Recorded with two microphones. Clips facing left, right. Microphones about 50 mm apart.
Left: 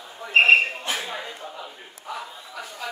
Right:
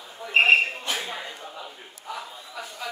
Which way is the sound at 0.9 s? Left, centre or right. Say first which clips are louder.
Left 1 dB; centre.